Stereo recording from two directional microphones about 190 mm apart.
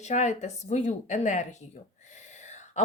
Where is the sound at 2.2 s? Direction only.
40° left (ahead or behind).